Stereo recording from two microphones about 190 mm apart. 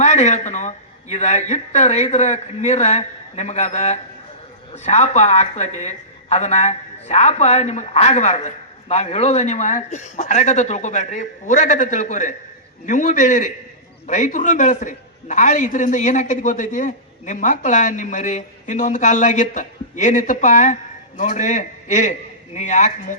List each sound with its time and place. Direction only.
0.0 s a man's voice: 35° left (ahead or behind)